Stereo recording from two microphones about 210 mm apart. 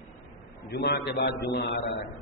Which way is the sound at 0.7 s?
50° left (ahead or behind).